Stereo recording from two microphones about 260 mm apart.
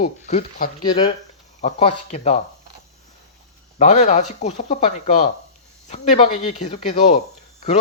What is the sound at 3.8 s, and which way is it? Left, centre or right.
Speech, left.